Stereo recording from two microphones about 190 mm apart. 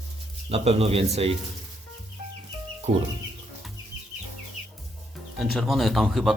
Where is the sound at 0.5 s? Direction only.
30° right (ahead or behind).